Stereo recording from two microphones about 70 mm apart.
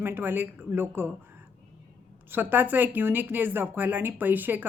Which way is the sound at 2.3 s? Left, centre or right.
Right.